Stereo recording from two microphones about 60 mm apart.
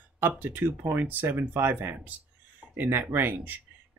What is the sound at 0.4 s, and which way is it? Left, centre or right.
Speech, right.